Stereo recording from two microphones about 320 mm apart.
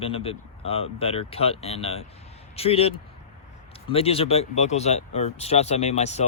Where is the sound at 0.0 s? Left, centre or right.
Centre.